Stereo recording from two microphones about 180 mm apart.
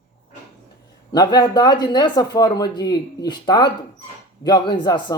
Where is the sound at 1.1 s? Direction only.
25° left (ahead or behind).